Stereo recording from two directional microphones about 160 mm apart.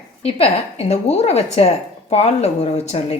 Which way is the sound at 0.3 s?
40° left (ahead or behind).